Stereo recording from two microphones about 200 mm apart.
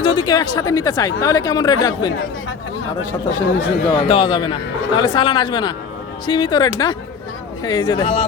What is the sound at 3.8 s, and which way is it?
Speech, 25° left (ahead or behind).